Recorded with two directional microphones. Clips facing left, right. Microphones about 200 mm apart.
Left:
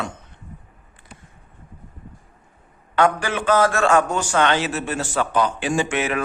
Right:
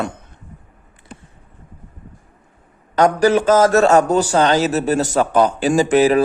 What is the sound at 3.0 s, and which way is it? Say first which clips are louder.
A man's voice: right 7 dB; 40° right (ahead or behind).